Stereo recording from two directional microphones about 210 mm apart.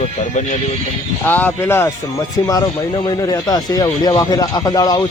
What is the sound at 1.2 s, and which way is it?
Speech, 10° left (ahead or behind).